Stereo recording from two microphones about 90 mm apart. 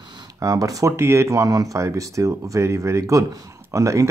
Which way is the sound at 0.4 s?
40° right (ahead or behind).